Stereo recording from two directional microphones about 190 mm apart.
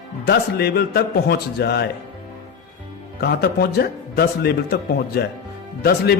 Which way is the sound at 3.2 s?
55° left (ahead or behind).